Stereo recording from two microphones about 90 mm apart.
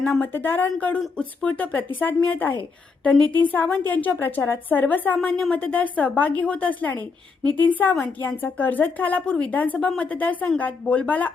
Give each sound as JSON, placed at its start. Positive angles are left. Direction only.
{"t": 0.2, "sound": "a woman's voice", "side_deg": 20}